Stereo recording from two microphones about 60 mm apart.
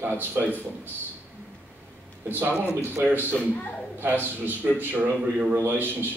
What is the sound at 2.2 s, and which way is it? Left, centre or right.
A man's voice, right.